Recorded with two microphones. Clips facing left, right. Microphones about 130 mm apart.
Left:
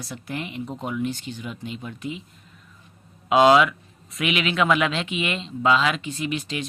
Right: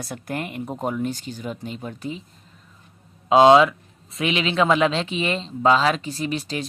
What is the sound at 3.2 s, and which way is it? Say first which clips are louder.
Speech: right 3 dB; 30° right (ahead or behind).